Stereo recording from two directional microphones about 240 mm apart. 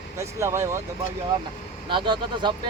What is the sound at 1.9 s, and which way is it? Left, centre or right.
Speech, centre.